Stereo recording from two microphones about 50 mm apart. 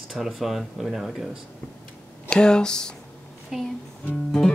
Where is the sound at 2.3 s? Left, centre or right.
Centre.